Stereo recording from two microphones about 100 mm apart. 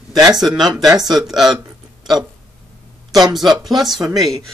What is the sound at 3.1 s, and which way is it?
Speech, 40° right (ahead or behind).